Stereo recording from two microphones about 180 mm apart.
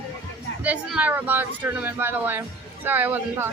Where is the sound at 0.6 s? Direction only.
5° right (ahead or behind).